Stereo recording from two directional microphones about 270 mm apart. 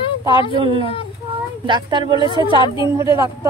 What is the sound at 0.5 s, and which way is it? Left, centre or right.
A woman's voice, centre.